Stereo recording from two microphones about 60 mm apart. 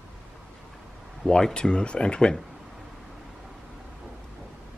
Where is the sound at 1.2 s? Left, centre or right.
Centre.